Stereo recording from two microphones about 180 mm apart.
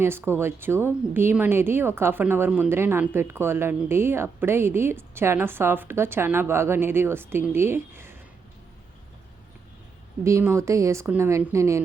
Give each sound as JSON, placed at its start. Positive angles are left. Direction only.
{"t": 0.0, "sound": "a woman's voice", "side_deg": -15}
{"t": 10.2, "sound": "a woman's voice", "side_deg": -15}